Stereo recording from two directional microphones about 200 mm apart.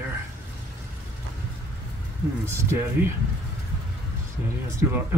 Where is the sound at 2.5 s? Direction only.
15° right (ahead or behind).